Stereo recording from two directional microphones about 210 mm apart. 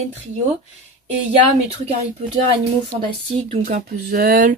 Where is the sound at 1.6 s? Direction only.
25° right (ahead or behind); by 4.5 s 45° right (ahead or behind).